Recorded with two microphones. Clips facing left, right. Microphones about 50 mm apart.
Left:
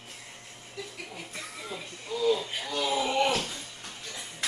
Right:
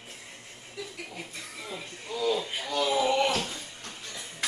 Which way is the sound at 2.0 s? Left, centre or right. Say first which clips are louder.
Left 2 dB; right.